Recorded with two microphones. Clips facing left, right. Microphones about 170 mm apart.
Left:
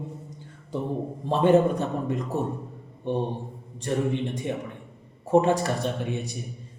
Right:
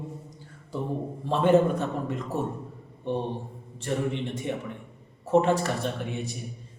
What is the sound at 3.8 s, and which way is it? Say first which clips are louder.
A man's voice: left 3 dB; 15° left (ahead or behind).